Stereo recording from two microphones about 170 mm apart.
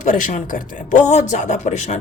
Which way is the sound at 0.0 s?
45° left (ahead or behind).